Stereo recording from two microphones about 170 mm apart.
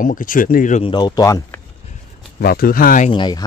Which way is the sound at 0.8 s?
25° left (ahead or behind).